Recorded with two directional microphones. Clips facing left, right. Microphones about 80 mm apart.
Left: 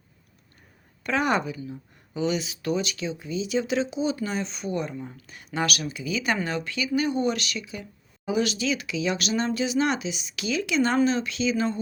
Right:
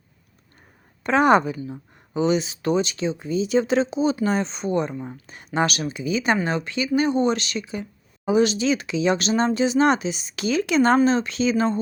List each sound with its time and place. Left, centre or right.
1.0 s speech: right